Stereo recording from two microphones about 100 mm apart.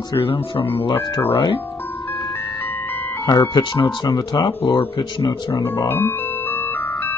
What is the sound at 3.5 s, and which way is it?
Speech, 50° left (ahead or behind).